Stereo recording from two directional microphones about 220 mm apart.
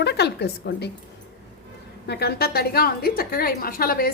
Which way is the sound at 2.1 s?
45° left (ahead or behind).